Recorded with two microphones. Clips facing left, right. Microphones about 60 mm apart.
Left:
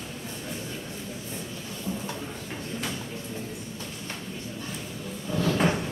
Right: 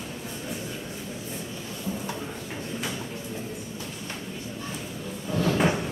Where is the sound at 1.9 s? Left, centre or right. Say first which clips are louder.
Right 1 dB; centre.